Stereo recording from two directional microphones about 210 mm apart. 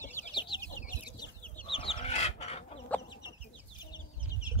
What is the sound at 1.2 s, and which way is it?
Chicken, 55° left (ahead or behind).